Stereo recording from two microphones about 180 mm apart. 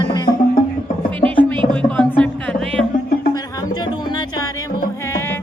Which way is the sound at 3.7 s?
25° left (ahead or behind).